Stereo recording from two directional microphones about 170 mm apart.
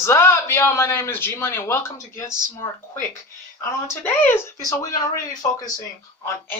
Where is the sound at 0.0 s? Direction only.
15° left (ahead or behind).